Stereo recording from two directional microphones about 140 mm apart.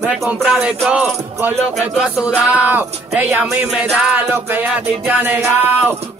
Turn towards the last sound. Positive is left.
turn(degrees=-15)  # may be behind; listen again after turning